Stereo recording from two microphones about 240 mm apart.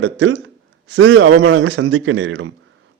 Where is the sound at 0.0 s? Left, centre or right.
Right.